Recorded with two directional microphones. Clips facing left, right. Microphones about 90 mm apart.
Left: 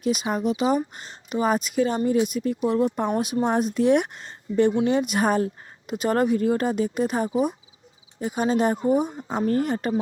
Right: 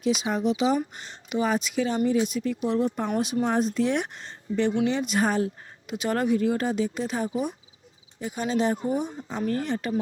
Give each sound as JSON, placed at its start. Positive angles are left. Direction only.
{"t": 0.0, "sound": "speech", "side_deg": 50}
{"t": 3.3, "sound": "speech", "side_deg": 25}
{"t": 3.6, "sound": "speech", "side_deg": 55}
{"t": 9.4, "sound": "speech", "side_deg": 35}